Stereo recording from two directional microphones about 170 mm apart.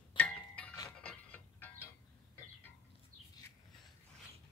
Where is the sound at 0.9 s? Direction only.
5° left (ahead or behind).